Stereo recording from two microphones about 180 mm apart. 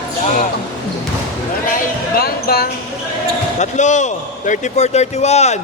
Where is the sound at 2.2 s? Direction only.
60° left (ahead or behind).